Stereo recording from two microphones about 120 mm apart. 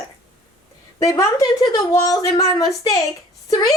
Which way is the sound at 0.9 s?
25° left (ahead or behind).